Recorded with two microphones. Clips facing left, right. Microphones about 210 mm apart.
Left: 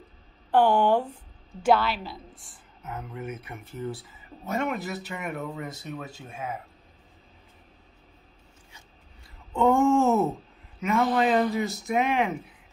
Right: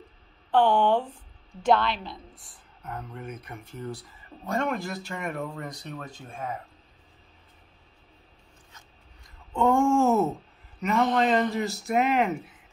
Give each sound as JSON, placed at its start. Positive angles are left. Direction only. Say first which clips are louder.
{"t": 0.5, "sound": "a woman's voice", "louder": "left 1 dB", "side_deg": 10}
{"t": 9.5, "sound": "a woman's voice", "louder": "left 1 dB", "side_deg": 5}